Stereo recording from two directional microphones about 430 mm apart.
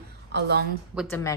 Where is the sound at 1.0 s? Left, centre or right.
Centre.